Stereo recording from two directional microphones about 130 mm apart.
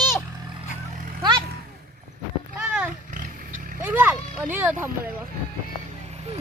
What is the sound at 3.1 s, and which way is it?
Roaring cats, 90° right.